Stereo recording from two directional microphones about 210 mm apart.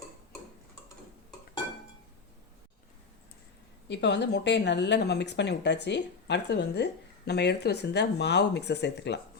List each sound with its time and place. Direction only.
3.8 s speech: 55° left (ahead or behind)